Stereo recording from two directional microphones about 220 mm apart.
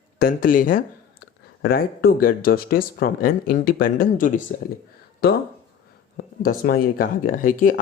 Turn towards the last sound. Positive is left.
turn(degrees=40)  # may be behind; listen again after turning